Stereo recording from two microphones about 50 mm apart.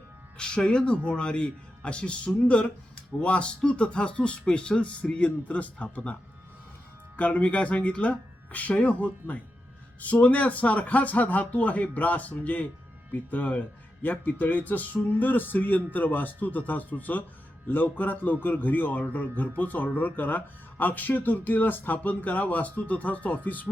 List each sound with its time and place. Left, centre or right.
0.3 s speech: centre
7.2 s speech: left